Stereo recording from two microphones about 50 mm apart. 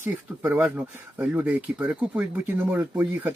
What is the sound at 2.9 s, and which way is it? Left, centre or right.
Speech, right.